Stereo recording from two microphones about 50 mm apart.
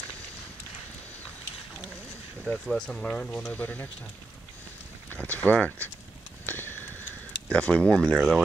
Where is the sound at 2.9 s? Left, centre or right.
Left.